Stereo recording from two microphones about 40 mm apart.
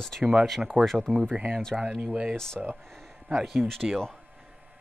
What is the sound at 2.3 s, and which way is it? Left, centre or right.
Speech, centre.